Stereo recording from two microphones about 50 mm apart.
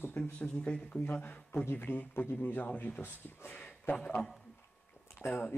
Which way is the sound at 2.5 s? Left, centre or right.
Left.